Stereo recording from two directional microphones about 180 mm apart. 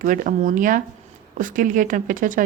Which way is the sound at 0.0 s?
45° right (ahead or behind).